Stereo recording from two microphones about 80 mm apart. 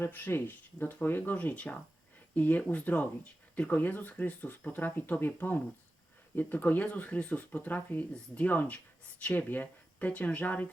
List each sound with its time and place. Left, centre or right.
0.0 s speech: left